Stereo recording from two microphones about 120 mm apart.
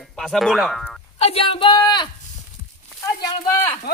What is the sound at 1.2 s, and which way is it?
Speech, 55° left (ahead or behind).